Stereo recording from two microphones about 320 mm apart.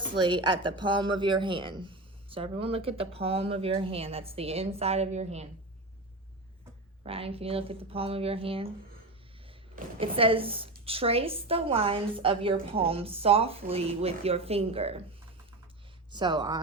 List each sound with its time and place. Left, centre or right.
0.0 s a woman's voice: centre
7.0 s a woman's voice: centre
9.7 s a woman's voice: centre
16.1 s a woman's voice: centre